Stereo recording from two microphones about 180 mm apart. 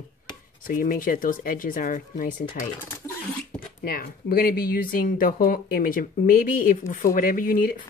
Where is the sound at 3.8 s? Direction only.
55° left (ahead or behind).